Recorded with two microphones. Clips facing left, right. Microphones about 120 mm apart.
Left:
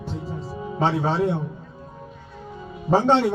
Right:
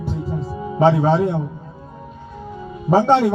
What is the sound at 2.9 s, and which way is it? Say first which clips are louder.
Speech: right 4 dB; 10° right (ahead or behind).